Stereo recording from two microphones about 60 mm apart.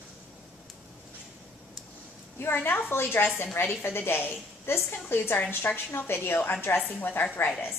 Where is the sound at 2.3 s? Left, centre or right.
Left.